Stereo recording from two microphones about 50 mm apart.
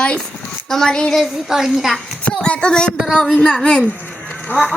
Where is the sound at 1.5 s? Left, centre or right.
Centre.